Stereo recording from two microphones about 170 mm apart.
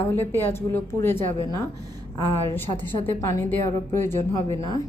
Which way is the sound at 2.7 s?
30° left (ahead or behind).